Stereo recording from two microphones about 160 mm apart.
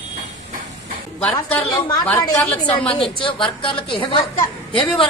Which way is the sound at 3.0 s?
35° left (ahead or behind).